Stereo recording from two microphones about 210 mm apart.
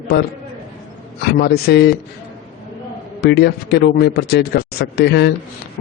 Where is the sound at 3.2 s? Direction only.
50° left (ahead or behind).